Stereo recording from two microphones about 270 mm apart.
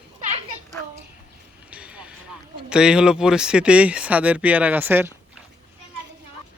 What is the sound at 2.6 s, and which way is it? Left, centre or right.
Speech, centre.